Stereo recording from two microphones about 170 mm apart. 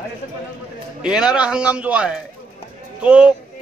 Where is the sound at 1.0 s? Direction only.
5° right (ahead or behind).